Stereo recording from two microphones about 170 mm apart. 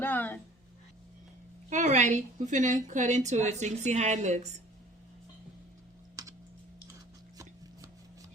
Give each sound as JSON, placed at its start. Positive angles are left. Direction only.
{"t": 0.0, "sound": "a woman's voice", "side_deg": 10}
{"t": 1.7, "sound": "a woman's voice", "side_deg": -45}